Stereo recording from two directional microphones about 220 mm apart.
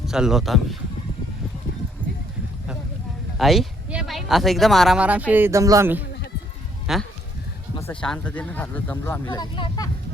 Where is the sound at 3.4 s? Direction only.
Centre (ahead or behind).